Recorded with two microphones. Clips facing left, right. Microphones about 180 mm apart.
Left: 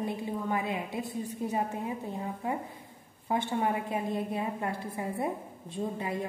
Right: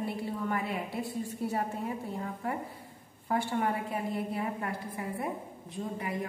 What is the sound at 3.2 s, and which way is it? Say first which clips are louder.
A woman's voice: left 1 dB; 20° left (ahead or behind).